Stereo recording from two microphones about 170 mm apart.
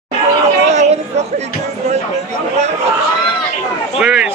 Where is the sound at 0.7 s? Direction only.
40° right (ahead or behind).